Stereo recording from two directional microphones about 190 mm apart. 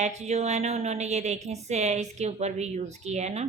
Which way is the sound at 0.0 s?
35° right (ahead or behind).